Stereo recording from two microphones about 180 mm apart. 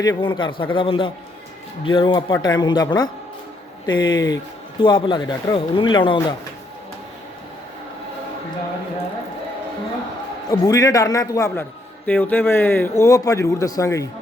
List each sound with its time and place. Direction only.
0.0 s speech: 25° left (ahead or behind)
10.5 s speech: 20° left (ahead or behind)